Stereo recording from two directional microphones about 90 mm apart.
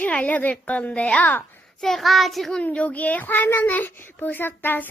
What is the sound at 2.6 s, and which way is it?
A child's voice, 15° left (ahead or behind).